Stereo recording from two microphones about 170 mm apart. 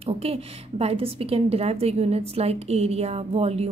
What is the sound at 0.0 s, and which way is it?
A woman's voice, 35° right (ahead or behind).